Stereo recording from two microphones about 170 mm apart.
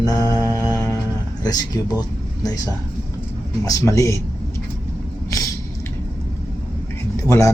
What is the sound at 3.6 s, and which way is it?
Speech, 20° left (ahead or behind).